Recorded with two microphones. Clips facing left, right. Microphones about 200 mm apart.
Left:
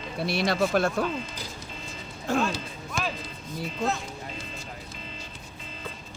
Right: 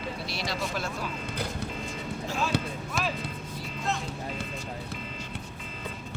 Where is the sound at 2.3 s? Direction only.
50° left (ahead or behind).